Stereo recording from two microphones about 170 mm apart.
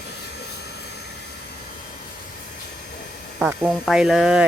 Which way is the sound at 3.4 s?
10° right (ahead or behind).